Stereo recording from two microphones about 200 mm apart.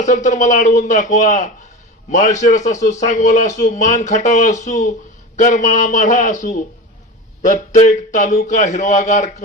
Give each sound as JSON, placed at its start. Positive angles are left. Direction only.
{"t": 0.0, "sound": "a man's voice", "side_deg": 35}